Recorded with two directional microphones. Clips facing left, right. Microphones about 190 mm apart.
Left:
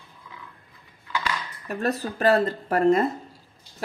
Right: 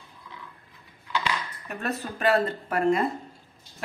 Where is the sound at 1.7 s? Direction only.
35° left (ahead or behind).